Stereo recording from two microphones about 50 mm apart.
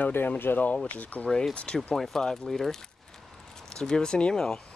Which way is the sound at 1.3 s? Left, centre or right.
Centre.